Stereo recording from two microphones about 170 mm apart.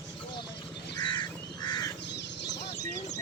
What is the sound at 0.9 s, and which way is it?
Crow, 25° left (ahead or behind).